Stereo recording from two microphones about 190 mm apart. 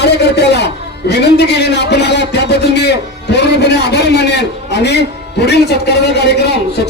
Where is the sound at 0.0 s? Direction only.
60° left (ahead or behind).